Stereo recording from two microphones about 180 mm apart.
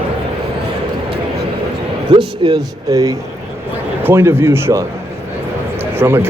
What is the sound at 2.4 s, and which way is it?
A man's voice, 20° right (ahead or behind).